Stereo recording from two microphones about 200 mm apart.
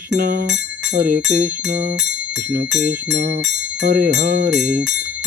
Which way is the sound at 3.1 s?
60° right (ahead or behind).